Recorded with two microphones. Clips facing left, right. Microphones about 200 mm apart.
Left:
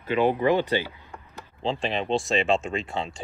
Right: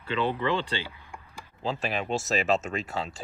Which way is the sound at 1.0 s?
15° right (ahead or behind).